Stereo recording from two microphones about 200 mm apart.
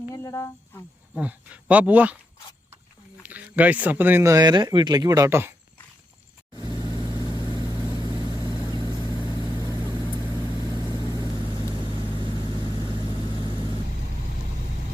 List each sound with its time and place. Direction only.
0.1 s a sound: 15° left (ahead or behind)
1.1 s speech: 5° right (ahead or behind)
3.2 s speech: 5° right (ahead or behind)
6.6 s vehicle: 20° right (ahead or behind)
8.0 s vehicle: 20° right (ahead or behind)
9.0 s vehicle: 10° right (ahead or behind)